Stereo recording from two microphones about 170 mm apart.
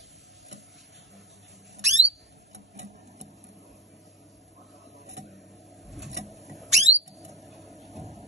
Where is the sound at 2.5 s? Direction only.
40° right (ahead or behind).